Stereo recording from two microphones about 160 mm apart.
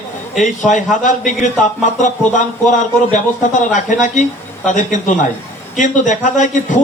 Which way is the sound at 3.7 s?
50° left (ahead or behind).